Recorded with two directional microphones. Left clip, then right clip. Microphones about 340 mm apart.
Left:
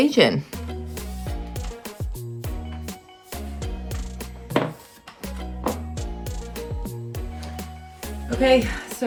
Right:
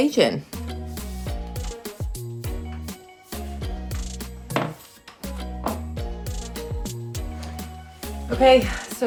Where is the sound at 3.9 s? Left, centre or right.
Centre.